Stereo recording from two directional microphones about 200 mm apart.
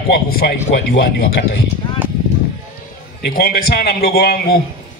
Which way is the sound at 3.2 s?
50° left (ahead or behind).